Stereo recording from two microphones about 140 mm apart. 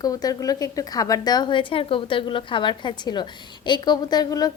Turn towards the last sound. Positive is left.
turn(degrees=30)  # may be behind; listen again after turning